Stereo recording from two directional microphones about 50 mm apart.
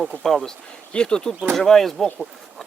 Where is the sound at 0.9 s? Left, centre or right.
Centre.